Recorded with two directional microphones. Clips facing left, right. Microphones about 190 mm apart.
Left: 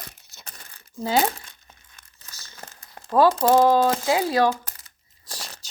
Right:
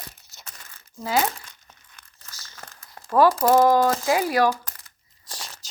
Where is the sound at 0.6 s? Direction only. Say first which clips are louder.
Left 6 dB; 35° left (ahead or behind).